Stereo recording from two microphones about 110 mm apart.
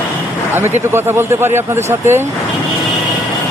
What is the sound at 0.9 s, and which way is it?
Speech, 20° right (ahead or behind).